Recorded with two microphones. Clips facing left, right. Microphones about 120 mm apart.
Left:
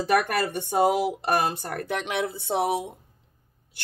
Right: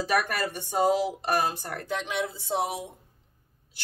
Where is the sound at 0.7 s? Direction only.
65° left (ahead or behind).